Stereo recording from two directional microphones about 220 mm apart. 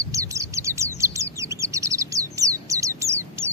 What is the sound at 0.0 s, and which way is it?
Chirp, 15° right (ahead or behind).